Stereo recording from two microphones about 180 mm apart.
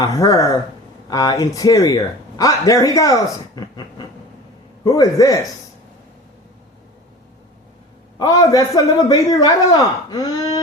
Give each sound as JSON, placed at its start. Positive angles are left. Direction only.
{"t": 0.0, "sound": "a man's voice", "side_deg": 20}
{"t": 8.2, "sound": "a man's voice", "side_deg": 20}